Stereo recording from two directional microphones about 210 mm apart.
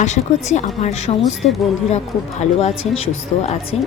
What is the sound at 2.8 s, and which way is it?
Speech, 70° left (ahead or behind).